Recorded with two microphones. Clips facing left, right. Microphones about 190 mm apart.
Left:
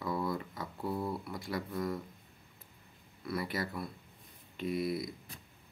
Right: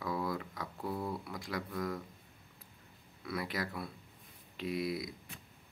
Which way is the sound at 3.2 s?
Centre (ahead or behind).